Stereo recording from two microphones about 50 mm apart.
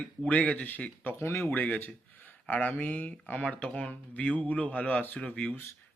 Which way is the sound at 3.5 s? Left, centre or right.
Left.